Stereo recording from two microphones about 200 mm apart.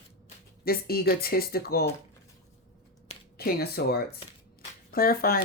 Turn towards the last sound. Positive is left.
turn(degrees=50)  # may be behind; listen again after turning